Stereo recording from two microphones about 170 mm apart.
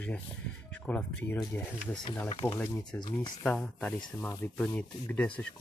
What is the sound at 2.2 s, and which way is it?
Speech, 30° left (ahead or behind).